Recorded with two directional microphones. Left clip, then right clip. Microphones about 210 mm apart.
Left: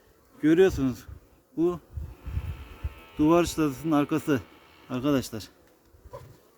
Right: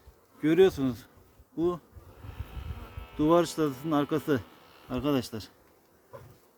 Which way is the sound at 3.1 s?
20° left (ahead or behind).